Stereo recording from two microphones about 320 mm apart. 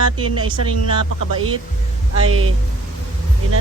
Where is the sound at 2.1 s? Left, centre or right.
Right.